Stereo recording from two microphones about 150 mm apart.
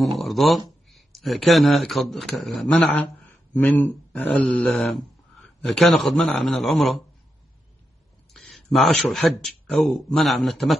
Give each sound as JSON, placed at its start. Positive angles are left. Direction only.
{"t": 0.2, "sound": "speech", "side_deg": 0}
{"t": 8.3, "sound": "speech", "side_deg": 0}